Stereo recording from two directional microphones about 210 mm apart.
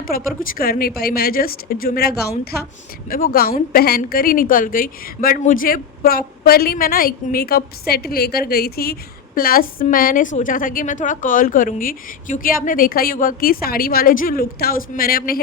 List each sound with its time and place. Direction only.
0.0 s a woman's voice: 45° left (ahead or behind)